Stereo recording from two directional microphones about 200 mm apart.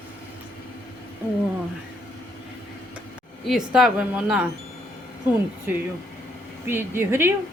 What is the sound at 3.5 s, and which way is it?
Speech, centre (ahead or behind).